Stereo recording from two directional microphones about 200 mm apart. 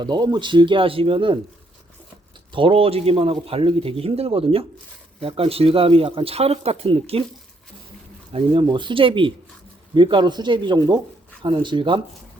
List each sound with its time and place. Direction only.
0.0 s a man's voice: 20° right (ahead or behind)
2.5 s a man's voice: 25° right (ahead or behind)
8.3 s a man's voice: 25° right (ahead or behind)